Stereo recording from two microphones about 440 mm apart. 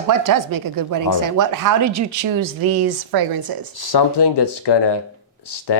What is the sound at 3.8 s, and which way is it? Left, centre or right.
Speech, left.